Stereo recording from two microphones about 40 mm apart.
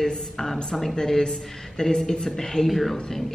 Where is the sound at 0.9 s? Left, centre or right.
Centre.